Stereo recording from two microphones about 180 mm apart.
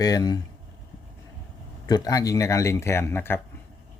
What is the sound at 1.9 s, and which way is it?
Speech, 20° left (ahead or behind).